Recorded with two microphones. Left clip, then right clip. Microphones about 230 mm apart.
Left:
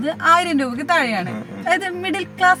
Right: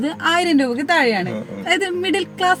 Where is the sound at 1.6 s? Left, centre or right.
Centre.